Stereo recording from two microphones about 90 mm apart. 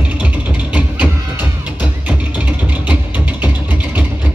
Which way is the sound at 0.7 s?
15° right (ahead or behind).